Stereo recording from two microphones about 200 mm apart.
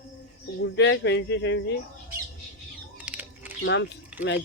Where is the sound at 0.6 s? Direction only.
60° left (ahead or behind).